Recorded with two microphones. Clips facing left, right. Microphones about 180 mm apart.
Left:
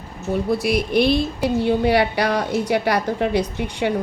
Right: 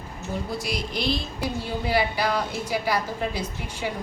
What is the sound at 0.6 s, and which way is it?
A woman's voice, 60° left (ahead or behind).